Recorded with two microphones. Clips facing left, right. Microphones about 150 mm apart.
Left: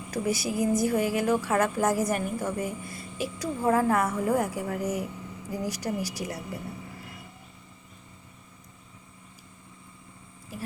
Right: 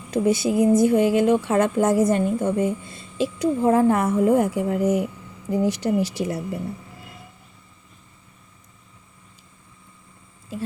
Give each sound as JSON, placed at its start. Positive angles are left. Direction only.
{"t": 0.1, "sound": "speech", "side_deg": -25}
{"t": 10.5, "sound": "speech", "side_deg": -25}